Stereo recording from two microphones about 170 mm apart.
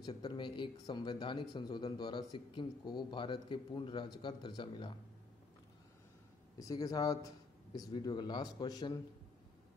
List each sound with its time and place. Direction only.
0.0 s speech: 30° left (ahead or behind)
6.6 s speech: 20° left (ahead or behind)